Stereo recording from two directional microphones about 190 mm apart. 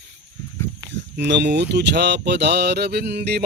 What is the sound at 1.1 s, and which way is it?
Speech, 65° right (ahead or behind).